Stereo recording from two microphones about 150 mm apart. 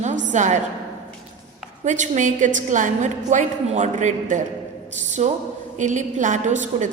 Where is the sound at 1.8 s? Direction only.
55° right (ahead or behind).